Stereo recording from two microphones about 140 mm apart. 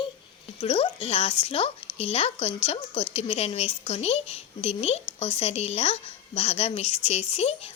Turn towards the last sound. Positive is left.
turn(degrees=50)  # may be behind; listen again after turning